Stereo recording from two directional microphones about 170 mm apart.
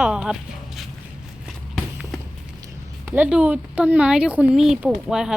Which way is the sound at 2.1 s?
Centre (ahead or behind).